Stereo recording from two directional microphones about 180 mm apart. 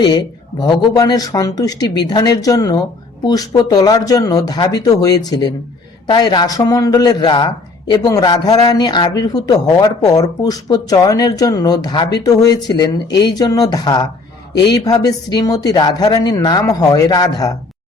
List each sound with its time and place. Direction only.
0.0 s a man's voice: 25° left (ahead or behind)